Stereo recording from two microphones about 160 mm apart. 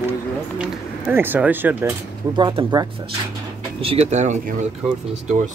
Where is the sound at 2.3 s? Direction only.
30° right (ahead or behind).